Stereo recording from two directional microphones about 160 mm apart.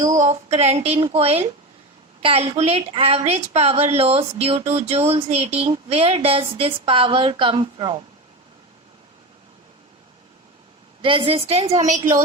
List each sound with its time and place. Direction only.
0.0 s a woman's voice: 50° right (ahead or behind); by 8.0 s 30° right (ahead or behind)
11.0 s a woman's voice: 30° right (ahead or behind)
11.7 s a woman's voice: 50° right (ahead or behind)